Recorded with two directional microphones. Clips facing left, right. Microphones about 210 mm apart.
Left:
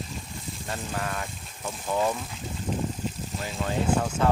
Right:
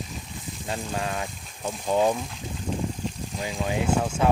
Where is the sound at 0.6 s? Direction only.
20° right (ahead or behind).